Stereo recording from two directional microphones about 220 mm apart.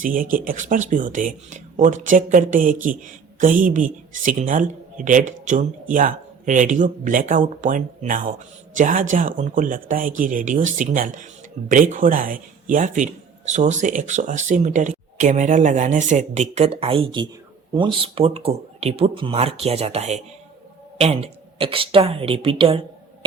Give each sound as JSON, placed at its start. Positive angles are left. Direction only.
{"t": 0.0, "sound": "a man's voice", "side_deg": -40}